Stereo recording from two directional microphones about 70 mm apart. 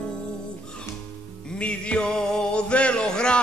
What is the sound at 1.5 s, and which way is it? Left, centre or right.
Music, centre.